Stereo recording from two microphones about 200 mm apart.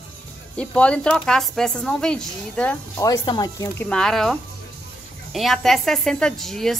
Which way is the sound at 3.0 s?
20° left (ahead or behind).